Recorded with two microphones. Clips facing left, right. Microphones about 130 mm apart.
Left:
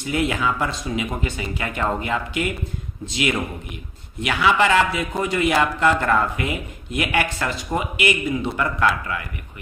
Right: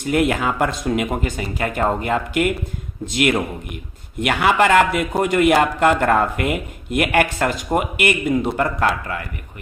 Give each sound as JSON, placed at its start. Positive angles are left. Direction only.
{"t": 0.0, "sound": "a man's voice", "side_deg": -55}